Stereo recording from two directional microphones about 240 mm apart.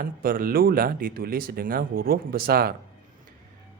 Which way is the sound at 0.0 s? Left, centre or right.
Right.